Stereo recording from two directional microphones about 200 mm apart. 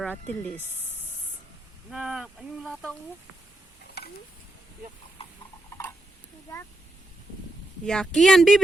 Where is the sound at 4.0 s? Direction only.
55° left (ahead or behind).